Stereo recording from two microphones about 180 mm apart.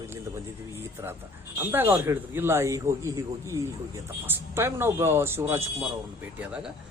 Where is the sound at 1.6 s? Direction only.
10° right (ahead or behind).